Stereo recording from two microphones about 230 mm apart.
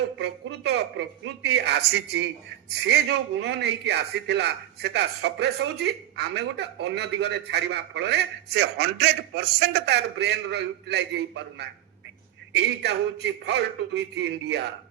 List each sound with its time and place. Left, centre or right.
0.2 s a man's voice: right